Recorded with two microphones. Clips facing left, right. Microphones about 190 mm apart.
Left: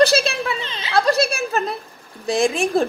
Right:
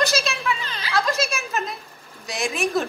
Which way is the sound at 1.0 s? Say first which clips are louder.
Left 8 dB; 35° left (ahead or behind).